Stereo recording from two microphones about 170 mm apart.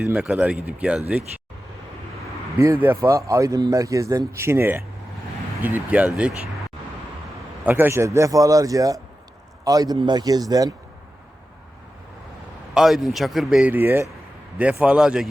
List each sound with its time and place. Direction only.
0.1 s a man's voice: 10° right (ahead or behind)
2.6 s a man's voice: 15° right (ahead or behind)
7.6 s speech: 10° right (ahead or behind)
12.7 s speech: centre (ahead or behind)